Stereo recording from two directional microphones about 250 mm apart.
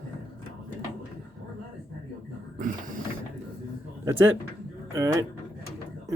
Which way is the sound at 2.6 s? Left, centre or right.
Right.